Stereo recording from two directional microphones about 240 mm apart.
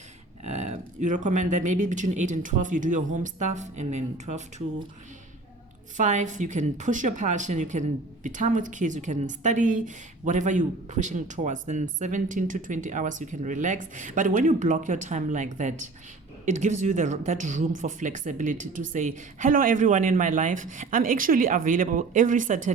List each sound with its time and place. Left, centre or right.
0.4 s speech: right
6.0 s speech: right